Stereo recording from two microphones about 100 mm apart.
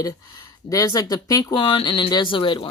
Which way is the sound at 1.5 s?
60° left (ahead or behind).